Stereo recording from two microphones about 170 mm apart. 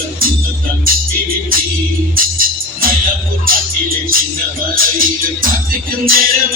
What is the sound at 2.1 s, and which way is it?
Music, 55° right (ahead or behind).